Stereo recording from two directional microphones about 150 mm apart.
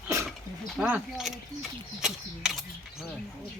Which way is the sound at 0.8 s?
10° right (ahead or behind).